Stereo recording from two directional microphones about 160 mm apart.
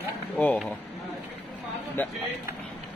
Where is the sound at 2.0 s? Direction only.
10° left (ahead or behind).